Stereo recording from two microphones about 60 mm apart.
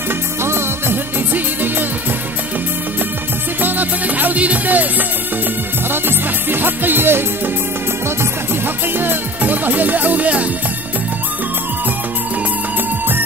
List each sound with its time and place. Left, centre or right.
0.4 s music: right
1.3 s music: right
3.6 s music: right
8.9 s music: right